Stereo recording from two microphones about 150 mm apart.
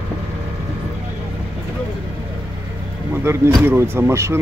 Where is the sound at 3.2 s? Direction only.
15° right (ahead or behind).